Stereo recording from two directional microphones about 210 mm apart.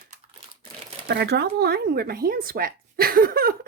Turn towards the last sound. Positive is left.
turn(degrees=-45)  # may be behind; listen again after turning